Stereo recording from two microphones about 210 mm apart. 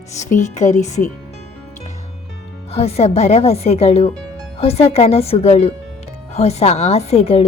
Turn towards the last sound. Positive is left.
turn(degrees=30)  # may be behind; listen again after turning